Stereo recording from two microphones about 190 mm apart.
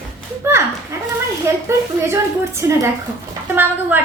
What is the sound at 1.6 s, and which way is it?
A woman's voice, 15° right (ahead or behind).